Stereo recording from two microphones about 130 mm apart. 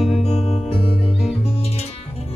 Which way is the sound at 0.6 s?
45° left (ahead or behind).